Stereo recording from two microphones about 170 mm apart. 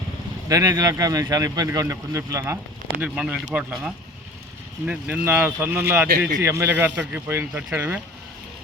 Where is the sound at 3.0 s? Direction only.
5° right (ahead or behind).